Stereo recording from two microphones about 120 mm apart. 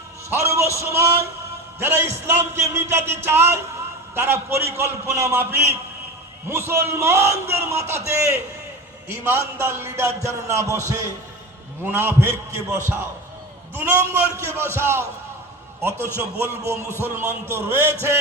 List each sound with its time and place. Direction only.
0.3 s a man's voice: 25° right (ahead or behind)